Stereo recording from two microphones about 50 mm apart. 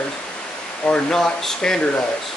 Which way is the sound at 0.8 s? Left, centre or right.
Centre.